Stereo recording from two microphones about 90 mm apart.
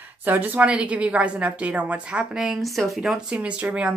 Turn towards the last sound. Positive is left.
turn(degrees=-15)  # may be behind; listen again after turning